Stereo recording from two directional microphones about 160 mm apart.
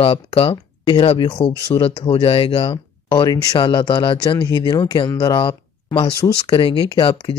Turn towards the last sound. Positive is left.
turn(degrees=35)  # may be behind; listen again after turning